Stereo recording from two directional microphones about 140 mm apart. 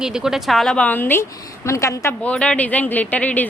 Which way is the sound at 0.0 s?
5° right (ahead or behind).